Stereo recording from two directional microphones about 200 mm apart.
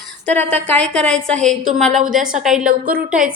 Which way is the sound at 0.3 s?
10° left (ahead or behind).